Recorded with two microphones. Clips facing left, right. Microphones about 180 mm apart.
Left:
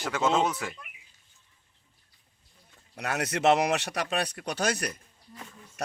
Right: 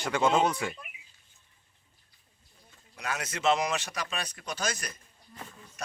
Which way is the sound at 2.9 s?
65° left (ahead or behind).